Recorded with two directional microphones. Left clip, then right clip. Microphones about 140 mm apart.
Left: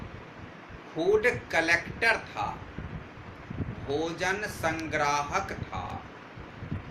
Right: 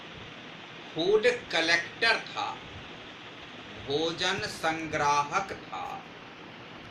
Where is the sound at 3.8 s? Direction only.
30° left (ahead or behind).